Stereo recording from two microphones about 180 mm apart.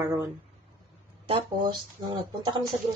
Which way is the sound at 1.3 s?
25° right (ahead or behind).